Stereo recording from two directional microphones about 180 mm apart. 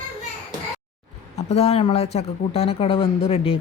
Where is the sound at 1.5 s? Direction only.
35° left (ahead or behind).